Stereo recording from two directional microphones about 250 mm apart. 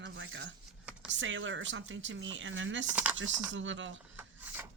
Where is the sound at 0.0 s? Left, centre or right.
Right.